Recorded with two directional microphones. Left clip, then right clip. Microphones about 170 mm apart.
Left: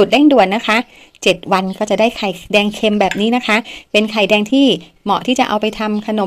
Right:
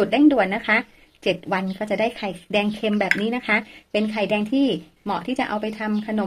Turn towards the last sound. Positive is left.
turn(degrees=35)  # may be behind; listen again after turning